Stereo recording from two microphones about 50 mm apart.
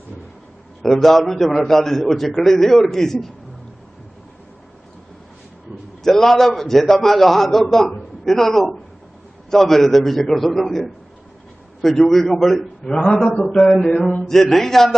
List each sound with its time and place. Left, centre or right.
0.8 s a man's voice: centre
6.0 s a man's voice: centre
13.9 s a sound: left
14.3 s a man's voice: centre